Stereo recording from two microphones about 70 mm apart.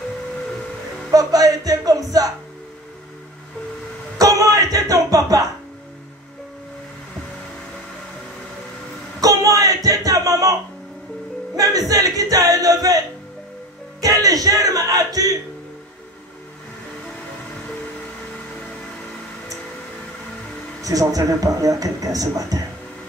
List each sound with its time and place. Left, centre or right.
1.1 s music: right
4.2 s music: right
9.2 s a sound: right
11.5 s music: right
14.0 s music: right
20.8 s speech: right